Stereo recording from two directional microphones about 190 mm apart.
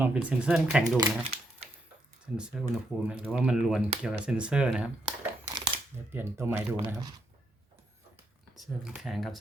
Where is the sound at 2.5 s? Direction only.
Centre (ahead or behind).